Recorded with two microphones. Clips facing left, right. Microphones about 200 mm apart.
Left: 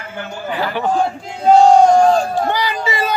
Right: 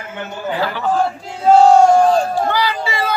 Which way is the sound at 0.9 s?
5° right (ahead or behind).